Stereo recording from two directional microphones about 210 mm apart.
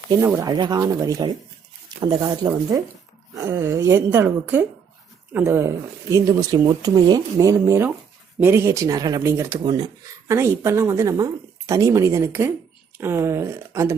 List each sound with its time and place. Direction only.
0.2 s speech: 15° right (ahead or behind)